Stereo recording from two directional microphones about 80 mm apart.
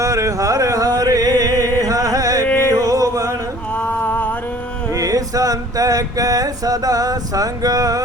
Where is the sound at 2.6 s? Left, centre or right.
Right.